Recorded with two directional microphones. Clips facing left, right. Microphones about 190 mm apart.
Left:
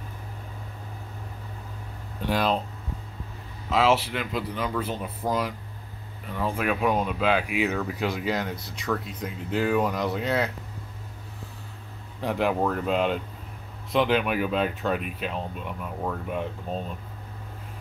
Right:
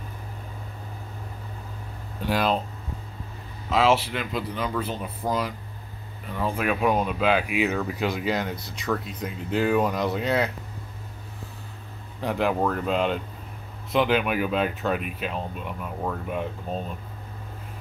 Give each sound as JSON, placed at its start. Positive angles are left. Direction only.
{"t": 2.3, "sound": "speech", "side_deg": -5}
{"t": 3.7, "sound": "speech", "side_deg": 5}
{"t": 6.4, "sound": "speech", "side_deg": -5}
{"t": 12.2, "sound": "speech", "side_deg": 5}